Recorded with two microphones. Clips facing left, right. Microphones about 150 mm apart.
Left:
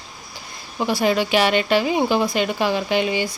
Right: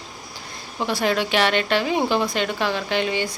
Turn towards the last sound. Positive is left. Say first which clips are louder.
# left 2 dB
turn(degrees=10)  # may be behind; listen again after turning